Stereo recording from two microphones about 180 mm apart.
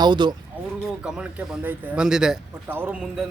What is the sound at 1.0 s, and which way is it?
Speech, 5° right (ahead or behind).